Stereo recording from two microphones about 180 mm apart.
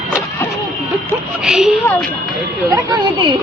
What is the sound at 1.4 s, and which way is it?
Speech, 5° right (ahead or behind).